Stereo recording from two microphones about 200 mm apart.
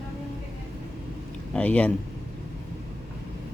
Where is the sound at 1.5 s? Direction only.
5° left (ahead or behind).